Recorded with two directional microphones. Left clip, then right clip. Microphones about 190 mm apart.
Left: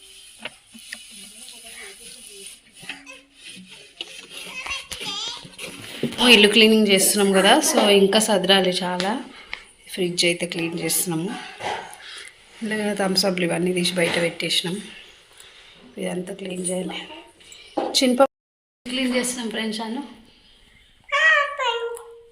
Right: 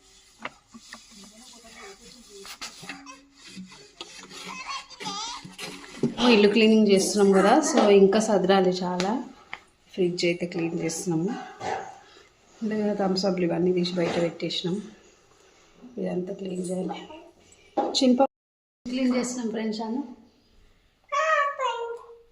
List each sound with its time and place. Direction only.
0.4 s a sound: 5° right (ahead or behind)
3.9 s rub: 15° right (ahead or behind)
4.5 s music: 40° right (ahead or behind)
6.2 s a woman's voice: 5° right (ahead or behind)
12.6 s a woman's voice: 5° right (ahead or behind)
16.0 s a woman's voice: centre (ahead or behind)
21.1 s a sound: centre (ahead or behind)